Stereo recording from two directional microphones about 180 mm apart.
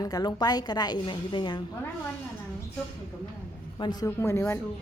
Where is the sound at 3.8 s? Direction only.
20° left (ahead or behind).